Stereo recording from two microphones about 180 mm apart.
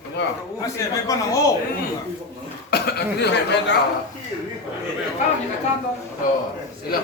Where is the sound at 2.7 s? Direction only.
65° left (ahead or behind).